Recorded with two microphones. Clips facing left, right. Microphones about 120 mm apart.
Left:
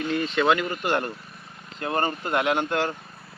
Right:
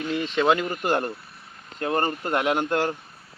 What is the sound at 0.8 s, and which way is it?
Speech, 35° right (ahead or behind).